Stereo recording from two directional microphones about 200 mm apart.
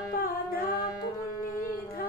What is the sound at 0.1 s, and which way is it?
Music, 45° left (ahead or behind).